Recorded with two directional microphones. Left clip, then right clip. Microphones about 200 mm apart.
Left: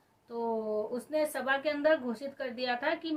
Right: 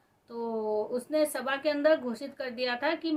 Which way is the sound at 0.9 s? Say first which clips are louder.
Right 3 dB; 20° right (ahead or behind).